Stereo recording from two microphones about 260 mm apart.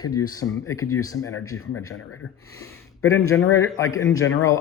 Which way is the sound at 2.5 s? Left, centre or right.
Centre.